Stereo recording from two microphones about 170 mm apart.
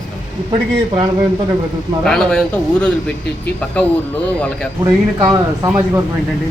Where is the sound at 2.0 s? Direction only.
5° left (ahead or behind).